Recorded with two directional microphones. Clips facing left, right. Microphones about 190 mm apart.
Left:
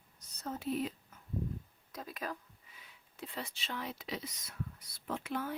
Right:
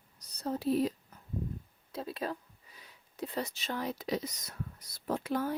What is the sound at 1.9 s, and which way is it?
Speech, 30° right (ahead or behind).